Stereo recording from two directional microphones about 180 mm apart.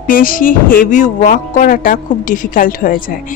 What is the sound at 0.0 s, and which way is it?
A woman's voice, 50° left (ahead or behind).